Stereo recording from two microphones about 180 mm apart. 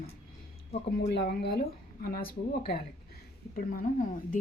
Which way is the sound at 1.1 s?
65° left (ahead or behind).